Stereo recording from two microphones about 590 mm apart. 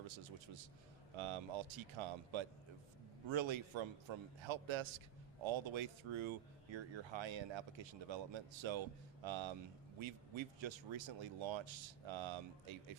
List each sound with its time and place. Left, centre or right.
1.1 s a man's voice: right